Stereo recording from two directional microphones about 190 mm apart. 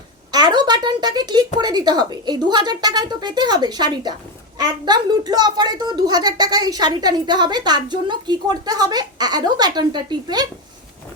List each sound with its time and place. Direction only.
0.3 s a woman's voice: 20° right (ahead or behind)